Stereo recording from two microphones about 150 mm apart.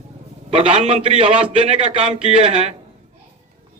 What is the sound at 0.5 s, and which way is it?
A man's voice, 45° right (ahead or behind).